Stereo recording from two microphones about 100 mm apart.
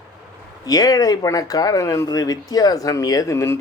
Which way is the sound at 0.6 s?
40° left (ahead or behind).